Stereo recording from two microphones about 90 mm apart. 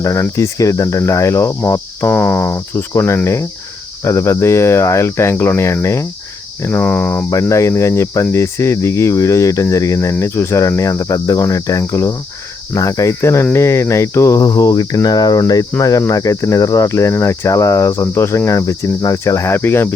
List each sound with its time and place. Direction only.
0.0 s cricket: 35° left (ahead or behind)
2.0 s speech: 20° left (ahead or behind)
2.5 s cricket: 35° left (ahead or behind)
6.7 s speech: 20° left (ahead or behind)
7.3 s cricket: 35° left (ahead or behind)